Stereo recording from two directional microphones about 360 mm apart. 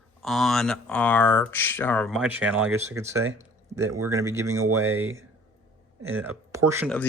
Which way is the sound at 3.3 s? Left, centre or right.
Centre.